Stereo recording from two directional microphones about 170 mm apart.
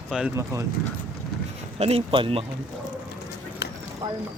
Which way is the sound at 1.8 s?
35° right (ahead or behind).